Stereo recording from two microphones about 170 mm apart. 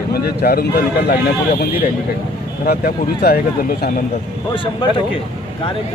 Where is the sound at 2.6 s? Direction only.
65° left (ahead or behind).